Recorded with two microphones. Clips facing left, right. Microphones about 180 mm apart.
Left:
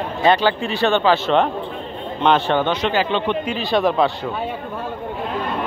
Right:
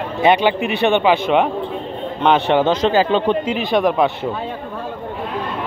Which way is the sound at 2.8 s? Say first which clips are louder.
Right 4 dB; 40° right (ahead or behind).